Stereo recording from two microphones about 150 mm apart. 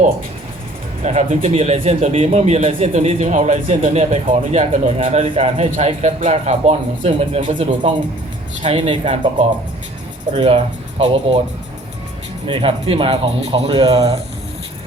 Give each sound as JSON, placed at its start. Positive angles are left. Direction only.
{"t": 1.0, "sound": "speech", "side_deg": -50}
{"t": 10.3, "sound": "speech", "side_deg": -40}
{"t": 12.5, "sound": "speech", "side_deg": -35}